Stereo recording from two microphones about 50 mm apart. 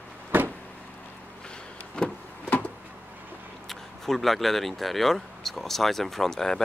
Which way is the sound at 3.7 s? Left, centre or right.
Centre.